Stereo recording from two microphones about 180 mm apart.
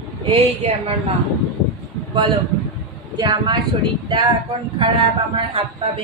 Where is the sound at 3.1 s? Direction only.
25° right (ahead or behind).